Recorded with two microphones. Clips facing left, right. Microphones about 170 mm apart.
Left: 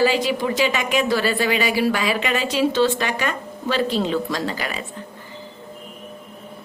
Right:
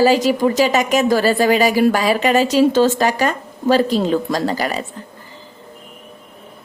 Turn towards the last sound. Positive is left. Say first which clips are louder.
# right 6 dB
turn(degrees=-40)  # may be behind; listen again after turning